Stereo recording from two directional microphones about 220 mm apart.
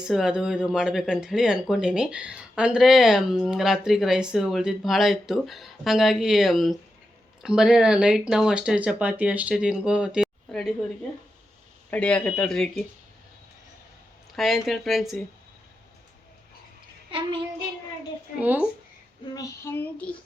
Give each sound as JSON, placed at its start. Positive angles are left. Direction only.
{"t": 0.0, "sound": "speech", "side_deg": 0}
{"t": 11.9, "sound": "speech", "side_deg": 5}
{"t": 14.3, "sound": "speech", "side_deg": 0}
{"t": 17.1, "sound": "child singing", "side_deg": -25}
{"t": 18.3, "sound": "speech", "side_deg": -5}
{"t": 19.3, "sound": "a sound", "side_deg": 15}